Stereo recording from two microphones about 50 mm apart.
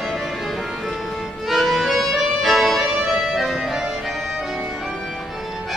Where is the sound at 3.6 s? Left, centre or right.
Centre.